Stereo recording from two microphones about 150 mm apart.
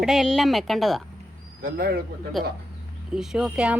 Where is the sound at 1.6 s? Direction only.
85° right.